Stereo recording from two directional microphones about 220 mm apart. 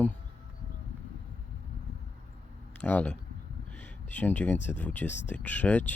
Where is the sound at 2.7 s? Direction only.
5° left (ahead or behind).